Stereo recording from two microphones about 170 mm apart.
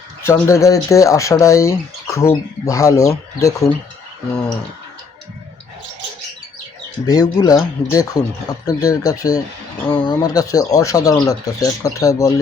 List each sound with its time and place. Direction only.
0.2 s speech: 15° left (ahead or behind)
7.0 s speech: 20° left (ahead or behind)